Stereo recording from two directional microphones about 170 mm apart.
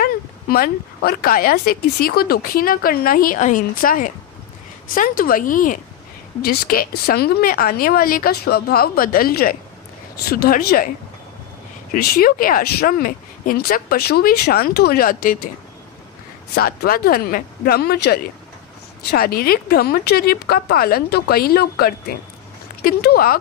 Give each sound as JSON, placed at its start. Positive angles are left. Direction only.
{"t": 0.0, "sound": "speech", "side_deg": 65}
{"t": 11.9, "sound": "speech", "side_deg": 60}
{"t": 16.5, "sound": "speech", "side_deg": 60}